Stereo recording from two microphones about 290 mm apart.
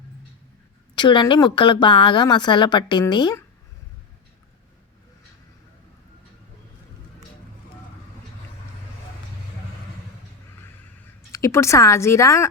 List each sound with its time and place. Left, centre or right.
0.9 s speech: centre
11.3 s speech: centre